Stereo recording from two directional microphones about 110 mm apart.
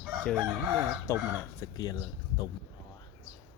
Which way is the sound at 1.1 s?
30° left (ahead or behind).